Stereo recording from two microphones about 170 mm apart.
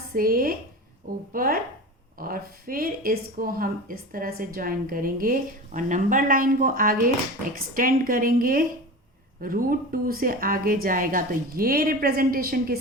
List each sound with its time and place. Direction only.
0.1 s speech: 60° right (ahead or behind)